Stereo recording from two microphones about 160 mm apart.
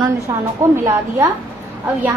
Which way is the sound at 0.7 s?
20° right (ahead or behind).